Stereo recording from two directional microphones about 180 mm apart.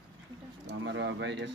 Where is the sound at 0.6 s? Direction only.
85° right.